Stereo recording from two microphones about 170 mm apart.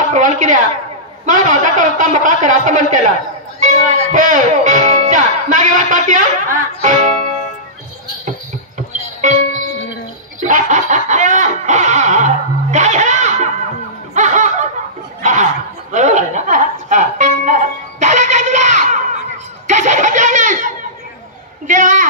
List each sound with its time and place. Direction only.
0.1 s a man's voice: 50° right (ahead or behind)
8.3 s music: 45° right (ahead or behind)
10.4 s snicker: 45° right (ahead or behind)
12.7 s music: 45° right (ahead or behind)
14.1 s snicker: 45° right (ahead or behind)
15.2 s chuckle: 45° right (ahead or behind)
19.7 s belly laugh: 45° right (ahead or behind)
21.6 s a sound: 50° right (ahead or behind)